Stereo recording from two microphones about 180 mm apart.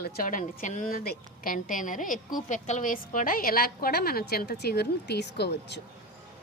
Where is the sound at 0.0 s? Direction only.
50° left (ahead or behind); by 5.8 s 70° left (ahead or behind).